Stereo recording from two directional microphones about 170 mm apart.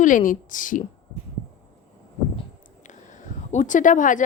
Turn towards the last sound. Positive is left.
turn(degrees=50)  # may be behind; listen again after turning